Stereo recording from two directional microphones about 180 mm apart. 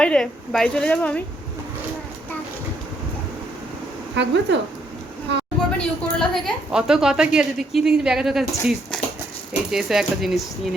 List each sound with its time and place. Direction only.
0.0 s a woman's voice: 5° left (ahead or behind)
4.1 s a woman's voice: 75° right (ahead or behind)
5.7 s a woman's voice: centre (ahead or behind)